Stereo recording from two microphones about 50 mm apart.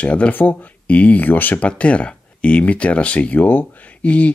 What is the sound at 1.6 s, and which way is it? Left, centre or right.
Speech, left.